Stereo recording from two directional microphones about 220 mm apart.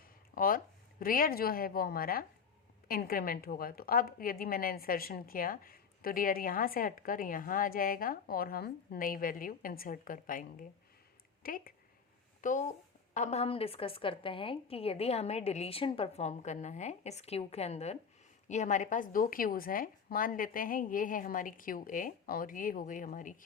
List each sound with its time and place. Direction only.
0.3 s a woman's voice: 40° left (ahead or behind)